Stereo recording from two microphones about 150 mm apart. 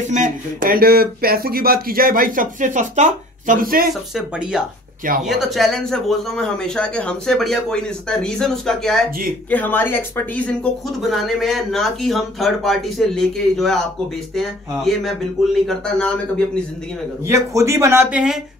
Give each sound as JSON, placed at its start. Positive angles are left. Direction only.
{"t": 0.1, "sound": "speech", "side_deg": -60}
{"t": 4.1, "sound": "speech", "side_deg": -5}
{"t": 17.3, "sound": "speech", "side_deg": -20}